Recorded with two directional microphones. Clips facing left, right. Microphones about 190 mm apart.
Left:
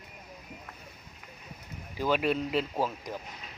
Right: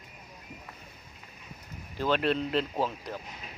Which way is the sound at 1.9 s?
10° left (ahead or behind).